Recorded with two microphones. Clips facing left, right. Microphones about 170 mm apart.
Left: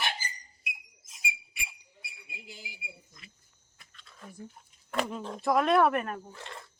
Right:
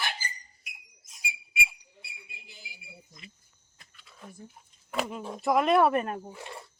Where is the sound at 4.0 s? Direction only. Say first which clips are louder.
Right 1 dB; 5° right (ahead or behind).